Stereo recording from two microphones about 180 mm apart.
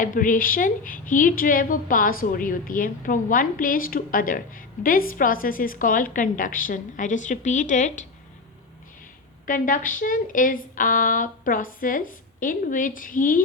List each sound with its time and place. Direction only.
0.0 s speech: 50° left (ahead or behind)
9.5 s speech: 50° left (ahead or behind)